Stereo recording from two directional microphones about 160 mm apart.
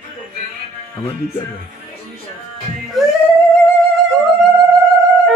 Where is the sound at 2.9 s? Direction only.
Centre (ahead or behind).